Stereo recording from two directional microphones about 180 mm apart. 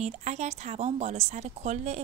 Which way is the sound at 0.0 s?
40° right (ahead or behind).